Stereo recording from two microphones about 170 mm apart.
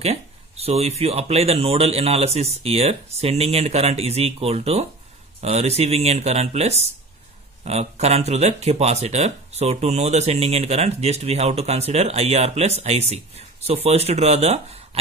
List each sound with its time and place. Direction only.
0.0 s speech: 35° right (ahead or behind)